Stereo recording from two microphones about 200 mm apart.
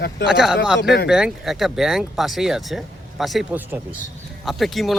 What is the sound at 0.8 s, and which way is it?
Speech, 55° left (ahead or behind).